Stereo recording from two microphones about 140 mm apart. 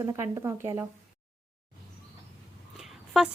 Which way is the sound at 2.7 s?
5° right (ahead or behind).